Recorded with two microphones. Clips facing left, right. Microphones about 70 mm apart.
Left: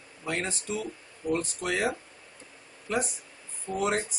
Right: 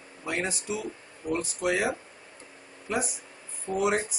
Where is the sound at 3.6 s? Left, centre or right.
Centre.